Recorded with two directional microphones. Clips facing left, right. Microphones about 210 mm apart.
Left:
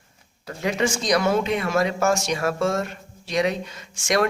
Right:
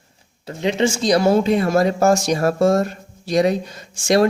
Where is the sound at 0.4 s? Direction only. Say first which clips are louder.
Right 5 dB; 25° right (ahead or behind).